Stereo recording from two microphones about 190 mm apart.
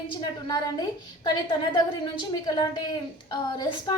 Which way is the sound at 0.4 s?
20° left (ahead or behind).